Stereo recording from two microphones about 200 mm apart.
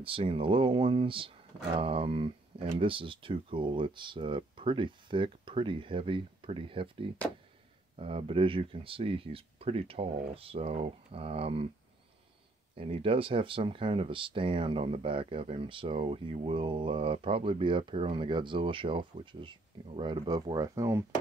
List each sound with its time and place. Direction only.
0.0 s speech: 25° right (ahead or behind)
12.7 s speech: 30° right (ahead or behind)